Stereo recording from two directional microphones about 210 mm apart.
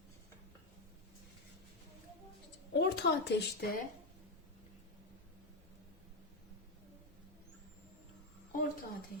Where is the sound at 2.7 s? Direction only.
55° left (ahead or behind).